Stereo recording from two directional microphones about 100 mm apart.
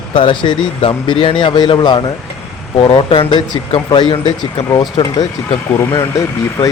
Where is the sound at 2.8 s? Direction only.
70° left (ahead or behind); by 4.3 s 50° left (ahead or behind).